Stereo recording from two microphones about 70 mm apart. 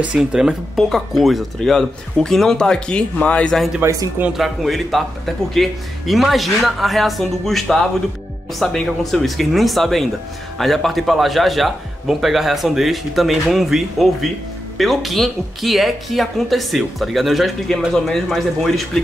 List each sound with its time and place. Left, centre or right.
0.0 s speech: centre
0.7 s a man's voice: centre
3.8 s speech: right
4.4 s a man's voice: centre